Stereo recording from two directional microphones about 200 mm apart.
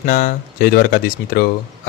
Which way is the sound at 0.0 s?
45° left (ahead or behind).